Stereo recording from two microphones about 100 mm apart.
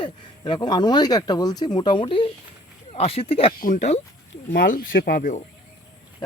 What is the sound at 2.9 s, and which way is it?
Speech, 85° left.